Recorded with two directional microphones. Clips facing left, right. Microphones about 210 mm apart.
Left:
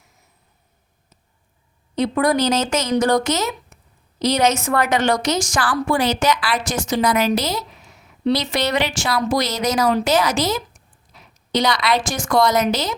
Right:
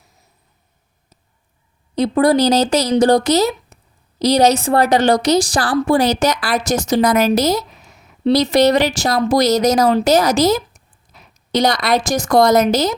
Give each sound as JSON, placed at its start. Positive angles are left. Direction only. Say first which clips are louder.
{"t": 2.0, "sound": "a woman's voice", "louder": "right 5 dB", "side_deg": -35}
{"t": 11.1, "sound": "a sound", "louder": "right 1 dB", "side_deg": -45}
{"t": 11.5, "sound": "a woman's voice", "louder": "right 3 dB", "side_deg": -40}